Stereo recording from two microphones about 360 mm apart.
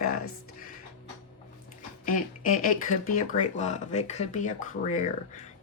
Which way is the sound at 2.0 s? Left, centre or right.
Left.